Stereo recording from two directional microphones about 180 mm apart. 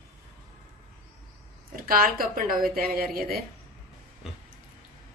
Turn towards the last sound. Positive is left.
turn(degrees=-5)  # may be behind; listen again after turning